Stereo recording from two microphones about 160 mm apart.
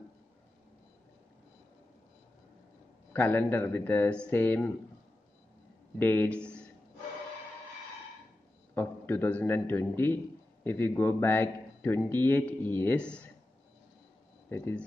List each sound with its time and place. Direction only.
3.1 s speech: 10° left (ahead or behind)
5.9 s speech: 10° left (ahead or behind)
8.7 s speech: 15° left (ahead or behind)
14.5 s speech: 15° left (ahead or behind)